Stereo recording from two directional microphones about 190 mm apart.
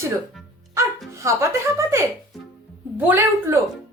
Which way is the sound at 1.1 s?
15° right (ahead or behind).